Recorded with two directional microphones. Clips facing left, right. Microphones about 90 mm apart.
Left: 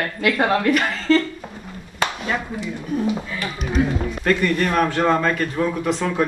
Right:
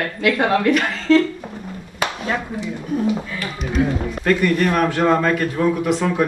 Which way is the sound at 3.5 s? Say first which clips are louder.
Right 1 dB; 35° right (ahead or behind).